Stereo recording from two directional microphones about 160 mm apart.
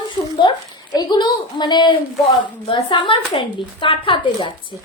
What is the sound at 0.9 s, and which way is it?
A woman's voice, 25° left (ahead or behind).